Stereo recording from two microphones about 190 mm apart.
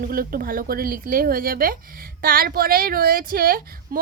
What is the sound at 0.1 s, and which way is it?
A woman's voice, 50° right (ahead or behind).